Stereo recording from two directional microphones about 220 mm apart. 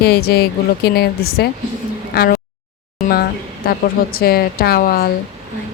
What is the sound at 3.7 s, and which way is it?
Speech, 40° left (ahead or behind).